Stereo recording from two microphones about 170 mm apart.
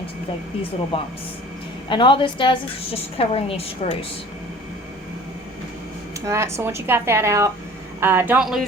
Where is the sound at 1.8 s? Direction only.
30° left (ahead or behind).